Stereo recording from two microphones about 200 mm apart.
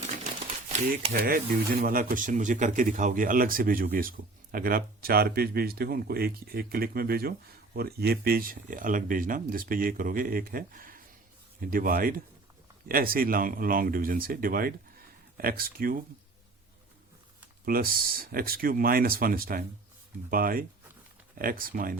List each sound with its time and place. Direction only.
0.7 s speech: 45° right (ahead or behind)
17.7 s speech: 45° right (ahead or behind)